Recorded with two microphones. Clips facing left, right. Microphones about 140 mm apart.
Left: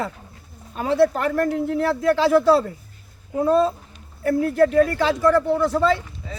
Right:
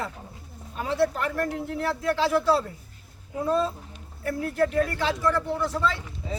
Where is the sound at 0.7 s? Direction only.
55° left (ahead or behind).